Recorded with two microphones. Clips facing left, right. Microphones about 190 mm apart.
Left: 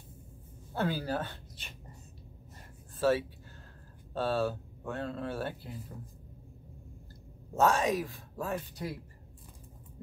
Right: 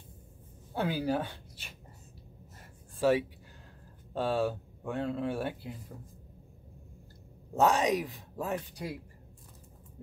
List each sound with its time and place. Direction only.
0.7 s speech: 15° right (ahead or behind)
3.0 s speech: 15° right (ahead or behind)
7.5 s speech: 15° right (ahead or behind)